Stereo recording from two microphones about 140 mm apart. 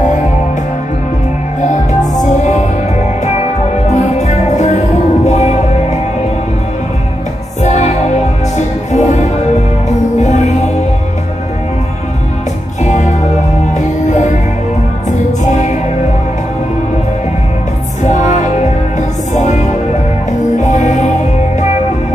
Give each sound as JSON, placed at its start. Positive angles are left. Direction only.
{"t": 1.6, "sound": "music", "side_deg": 60}
{"t": 7.6, "sound": "music", "side_deg": 55}
{"t": 12.8, "sound": "music", "side_deg": 60}
{"t": 18.0, "sound": "music", "side_deg": 60}